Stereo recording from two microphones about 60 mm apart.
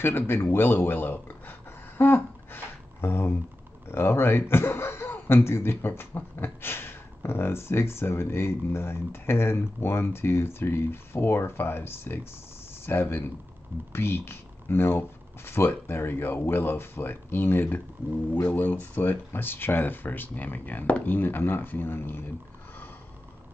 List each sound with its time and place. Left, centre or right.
0.0 s speech: left